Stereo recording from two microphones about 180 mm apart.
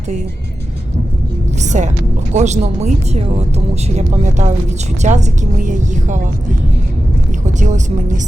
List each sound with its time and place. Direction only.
1.6 s music: 40° right (ahead or behind)
2.3 s a woman's voice: 40° right (ahead or behind)
7.6 s a woman's voice: 40° right (ahead or behind)